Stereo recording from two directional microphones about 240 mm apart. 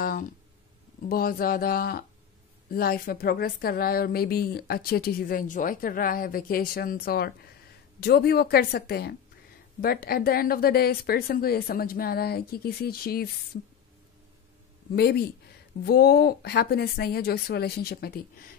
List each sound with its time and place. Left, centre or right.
0.0 s a sound: left
1.0 s a woman's voice: left
15.0 s a woman's voice: left